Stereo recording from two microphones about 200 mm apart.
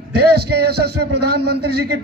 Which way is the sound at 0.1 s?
55° right (ahead or behind).